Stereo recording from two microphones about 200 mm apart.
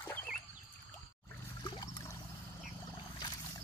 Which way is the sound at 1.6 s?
15° left (ahead or behind).